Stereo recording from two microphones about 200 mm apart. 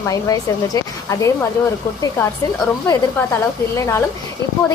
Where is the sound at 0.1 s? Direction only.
15° left (ahead or behind).